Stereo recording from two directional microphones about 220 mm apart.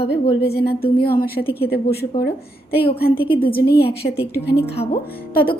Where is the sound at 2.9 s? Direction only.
45° left (ahead or behind).